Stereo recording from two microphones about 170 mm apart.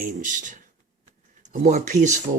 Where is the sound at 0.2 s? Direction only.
50° right (ahead or behind).